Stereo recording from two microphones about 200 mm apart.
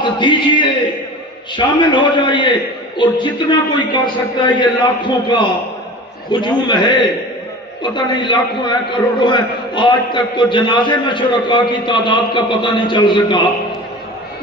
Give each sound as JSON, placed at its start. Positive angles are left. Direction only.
{"t": 0.0, "sound": "a man's voice", "side_deg": 25}